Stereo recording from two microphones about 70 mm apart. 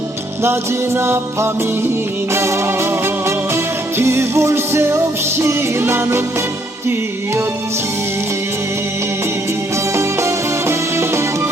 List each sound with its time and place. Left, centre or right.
0.9 s music: right
9.9 s music: right